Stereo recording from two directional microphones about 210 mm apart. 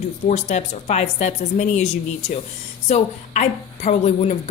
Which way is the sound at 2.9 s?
35° left (ahead or behind).